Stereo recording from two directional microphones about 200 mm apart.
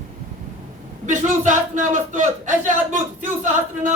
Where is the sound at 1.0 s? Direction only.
40° right (ahead or behind).